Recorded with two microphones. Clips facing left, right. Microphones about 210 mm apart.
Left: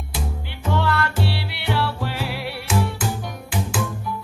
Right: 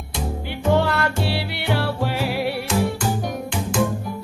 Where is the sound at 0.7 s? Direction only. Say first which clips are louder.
Left 2 dB; 45° right (ahead or behind).